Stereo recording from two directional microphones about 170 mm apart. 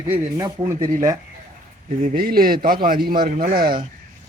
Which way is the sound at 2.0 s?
55° right (ahead or behind).